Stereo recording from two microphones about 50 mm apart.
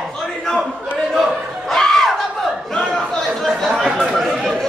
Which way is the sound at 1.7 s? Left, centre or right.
Centre.